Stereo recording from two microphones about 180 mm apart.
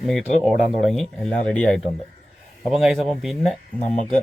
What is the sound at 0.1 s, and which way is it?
Speech, centre (ahead or behind).